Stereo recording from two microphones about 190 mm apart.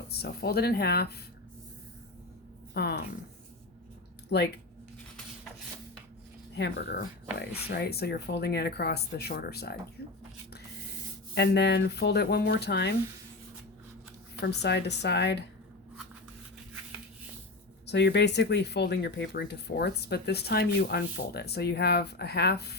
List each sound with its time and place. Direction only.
0.1 s speech: 55° left (ahead or behind)
2.7 s speech: 55° left (ahead or behind)
4.3 s speech: 60° left (ahead or behind)
6.6 s speech: 55° left (ahead or behind)
11.3 s speech: 60° left (ahead or behind)
14.4 s speech: 65° left (ahead or behind)
17.8 s speech: 65° left (ahead or behind)